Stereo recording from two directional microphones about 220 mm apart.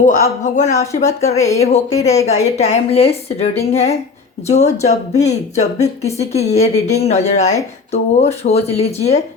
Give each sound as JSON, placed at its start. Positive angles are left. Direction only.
{"t": 0.0, "sound": "a woman's voice", "side_deg": 35}